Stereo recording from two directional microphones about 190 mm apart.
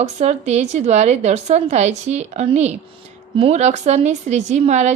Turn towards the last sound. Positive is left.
turn(degrees=-35)  # may be behind; listen again after turning